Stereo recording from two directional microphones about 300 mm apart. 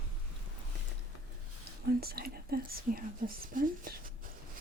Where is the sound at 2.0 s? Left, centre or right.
Right.